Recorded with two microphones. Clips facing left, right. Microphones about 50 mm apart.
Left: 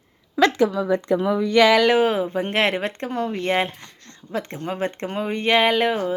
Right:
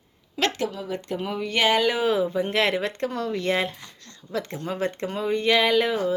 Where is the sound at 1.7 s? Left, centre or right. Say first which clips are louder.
Left 6 dB; left.